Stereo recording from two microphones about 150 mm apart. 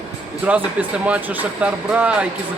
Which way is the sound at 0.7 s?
10° right (ahead or behind).